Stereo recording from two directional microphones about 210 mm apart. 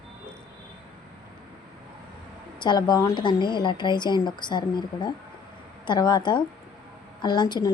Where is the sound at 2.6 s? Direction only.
20° left (ahead or behind).